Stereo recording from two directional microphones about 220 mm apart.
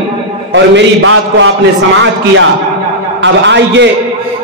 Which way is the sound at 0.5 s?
60° right (ahead or behind).